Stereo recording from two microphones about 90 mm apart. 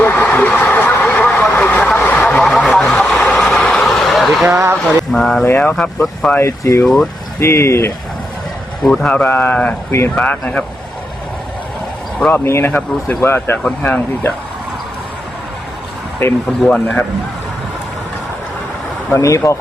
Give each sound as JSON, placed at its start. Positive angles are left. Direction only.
{"t": 0.0, "sound": "a sound", "side_deg": 20}
{"t": 1.0, "sound": "vehicle", "side_deg": 15}
{"t": 4.4, "sound": "a sound", "side_deg": -35}
{"t": 5.1, "sound": "vehicle", "side_deg": 5}
{"t": 5.5, "sound": "speech", "side_deg": 20}
{"t": 6.8, "sound": "speech", "side_deg": 5}
{"t": 7.3, "sound": "speech", "side_deg": 30}
{"t": 8.8, "sound": "speech", "side_deg": 10}
{"t": 9.2, "sound": "speech", "side_deg": 20}
{"t": 12.3, "sound": "speech", "side_deg": 30}
{"t": 16.5, "sound": "speech", "side_deg": 10}
{"t": 19.1, "sound": "speech", "side_deg": 35}